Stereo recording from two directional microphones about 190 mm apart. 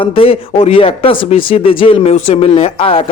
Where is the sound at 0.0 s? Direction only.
30° left (ahead or behind).